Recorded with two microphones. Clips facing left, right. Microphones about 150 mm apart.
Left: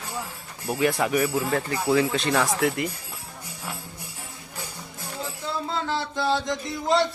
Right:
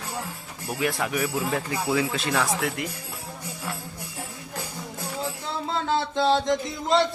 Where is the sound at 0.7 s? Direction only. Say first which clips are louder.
Left 4 dB; centre (ahead or behind).